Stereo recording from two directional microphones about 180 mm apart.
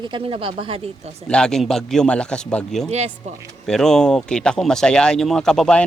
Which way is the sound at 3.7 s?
5° left (ahead or behind).